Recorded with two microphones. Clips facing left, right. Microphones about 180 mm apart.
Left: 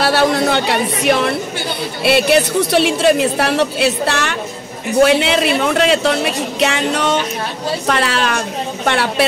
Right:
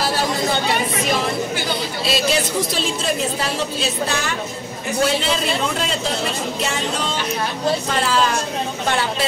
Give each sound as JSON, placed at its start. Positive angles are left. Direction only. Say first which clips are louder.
{"t": 0.0, "sound": "a woman's voice", "louder": "left 7 dB", "side_deg": 70}